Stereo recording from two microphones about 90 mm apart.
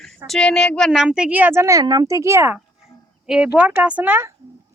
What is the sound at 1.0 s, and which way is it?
Speech, 10° right (ahead or behind).